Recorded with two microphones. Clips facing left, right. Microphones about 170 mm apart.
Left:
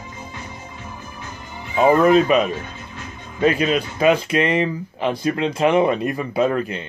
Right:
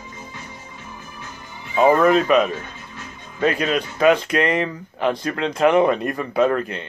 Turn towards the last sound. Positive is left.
turn(degrees=5)  # may be behind; listen again after turning